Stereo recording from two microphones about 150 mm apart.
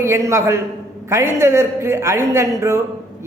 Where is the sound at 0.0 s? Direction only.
20° right (ahead or behind).